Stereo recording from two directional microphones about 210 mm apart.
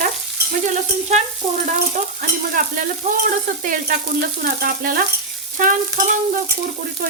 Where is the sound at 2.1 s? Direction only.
40° right (ahead or behind).